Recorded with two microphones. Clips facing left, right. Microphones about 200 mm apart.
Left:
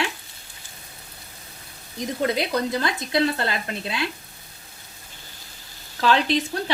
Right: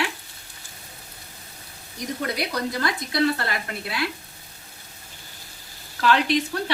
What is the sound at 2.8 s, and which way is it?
Speech, 25° left (ahead or behind).